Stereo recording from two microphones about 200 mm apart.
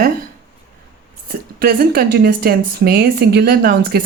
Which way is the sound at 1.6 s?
50° right (ahead or behind).